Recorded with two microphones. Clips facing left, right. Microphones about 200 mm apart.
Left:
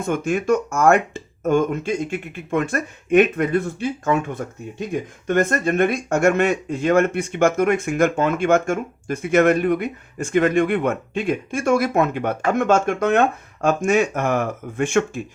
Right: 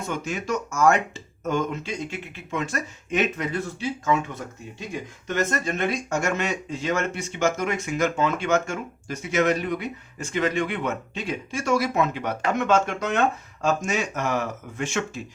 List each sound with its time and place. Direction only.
0.0 s speech: 55° left (ahead or behind)